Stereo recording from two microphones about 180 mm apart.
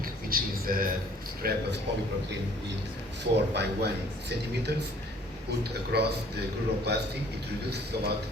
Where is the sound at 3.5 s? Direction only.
70° right (ahead or behind).